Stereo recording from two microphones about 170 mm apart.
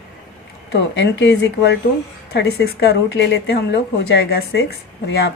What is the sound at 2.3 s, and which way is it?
Speech, 75° left (ahead or behind).